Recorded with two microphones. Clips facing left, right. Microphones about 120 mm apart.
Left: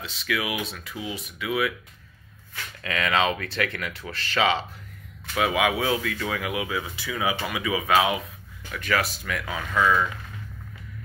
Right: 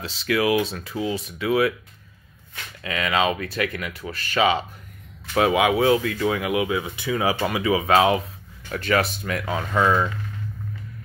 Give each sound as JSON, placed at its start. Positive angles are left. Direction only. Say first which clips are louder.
{"t": 0.0, "sound": "speech", "louder": "right 7 dB", "side_deg": -30}
{"t": 2.5, "sound": "speech", "louder": "right 1 dB", "side_deg": -20}
{"t": 5.3, "sound": "speech", "louder": "right 4 dB", "side_deg": -30}
{"t": 7.2, "sound": "speech", "louder": "right 4 dB", "side_deg": -35}